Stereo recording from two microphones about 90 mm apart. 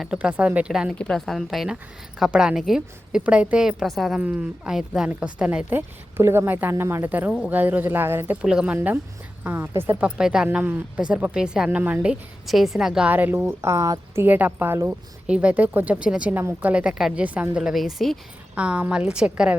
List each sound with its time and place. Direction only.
0.0 s a woman's voice: 10° right (ahead or behind)
0.9 s a woman's voice: 10° left (ahead or behind)
4.2 s a woman's voice: 15° right (ahead or behind)
5.7 s speech: 25° right (ahead or behind)
8.4 s a woman's voice: 10° right (ahead or behind); by 10.0 s 25° right (ahead or behind)
10.0 s a woman's voice: 10° right (ahead or behind)
13.1 s speech: 20° right (ahead or behind)
13.5 s speech: 30° right (ahead or behind)
14.2 s a woman's voice: 20° right (ahead or behind)
16.3 s speech: 25° right (ahead or behind)
17.0 s a woman's voice: 5° right (ahead or behind)
17.2 s a woman's voice: 15° right (ahead or behind); by 18.2 s centre (ahead or behind)
18.5 s a woman's voice: 15° right (ahead or behind)